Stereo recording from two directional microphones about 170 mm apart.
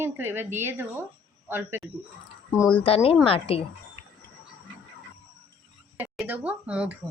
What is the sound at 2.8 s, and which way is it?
Speech, 35° left (ahead or behind).